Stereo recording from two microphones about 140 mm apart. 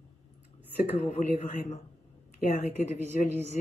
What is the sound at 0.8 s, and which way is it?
Speech, 55° left (ahead or behind).